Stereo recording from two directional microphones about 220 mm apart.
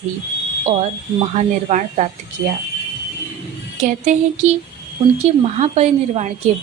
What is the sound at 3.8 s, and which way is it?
Speech, 35° right (ahead or behind).